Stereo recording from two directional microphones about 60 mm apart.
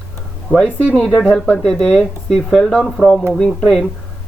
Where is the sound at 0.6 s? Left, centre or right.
Centre.